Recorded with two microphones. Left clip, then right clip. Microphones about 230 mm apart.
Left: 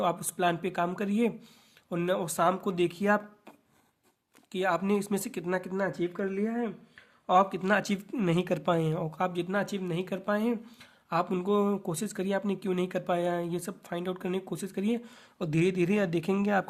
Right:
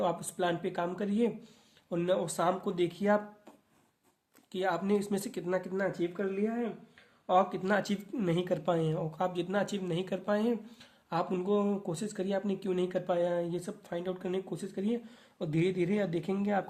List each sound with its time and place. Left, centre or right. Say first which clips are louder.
0.0 s speech: left 3 dB; left
4.5 s speech: left 3 dB; left